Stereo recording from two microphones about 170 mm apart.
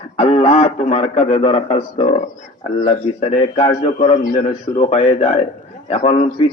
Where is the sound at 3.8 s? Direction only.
45° left (ahead or behind); by 6.5 s 30° left (ahead or behind).